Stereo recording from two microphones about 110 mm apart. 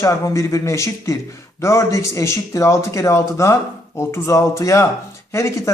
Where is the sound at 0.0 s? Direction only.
25° left (ahead or behind).